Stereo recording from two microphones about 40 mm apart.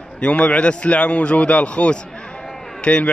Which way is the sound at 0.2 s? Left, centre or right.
Left.